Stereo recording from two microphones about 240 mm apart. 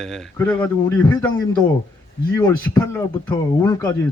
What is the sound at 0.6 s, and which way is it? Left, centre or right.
Speech, centre.